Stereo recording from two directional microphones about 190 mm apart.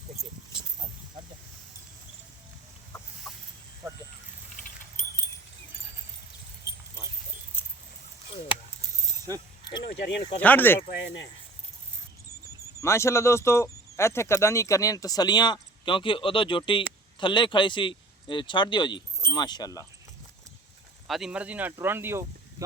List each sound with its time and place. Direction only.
9.3 s speech: 20° right (ahead or behind)
9.8 s a sound: 65° left (ahead or behind)
10.4 s speech: 10° left (ahead or behind)
10.9 s speech: 70° left (ahead or behind)
12.8 s speech: 15° left (ahead or behind)
21.1 s speech: 5° right (ahead or behind)